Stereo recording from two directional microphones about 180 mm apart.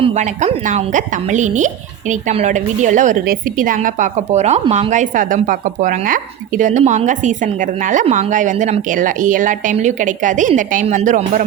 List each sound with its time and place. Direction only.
0.0 s a woman's voice: 40° right (ahead or behind)